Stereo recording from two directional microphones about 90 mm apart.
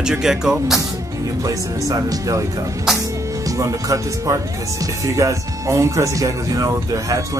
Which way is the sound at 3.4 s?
35° right (ahead or behind).